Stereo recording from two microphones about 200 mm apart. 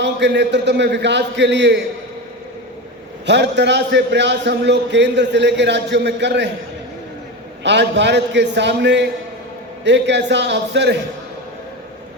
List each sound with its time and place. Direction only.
0.0 s a man's voice: 60° right (ahead or behind)
3.2 s a man's voice: 60° right (ahead or behind)
7.6 s a man's voice: 60° right (ahead or behind)